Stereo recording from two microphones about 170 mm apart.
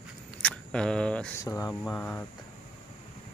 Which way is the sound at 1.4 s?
10° left (ahead or behind).